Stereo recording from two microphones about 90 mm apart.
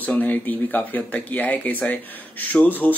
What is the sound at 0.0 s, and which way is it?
Speech, 20° left (ahead or behind).